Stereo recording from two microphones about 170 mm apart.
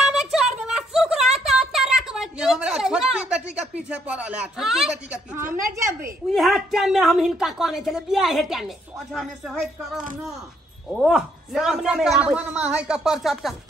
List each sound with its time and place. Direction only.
0.0 s a sound: 5° right (ahead or behind)
3.9 s speech: 10° right (ahead or behind)
5.5 s speech: 20° right (ahead or behind)
6.3 s speech: centre (ahead or behind)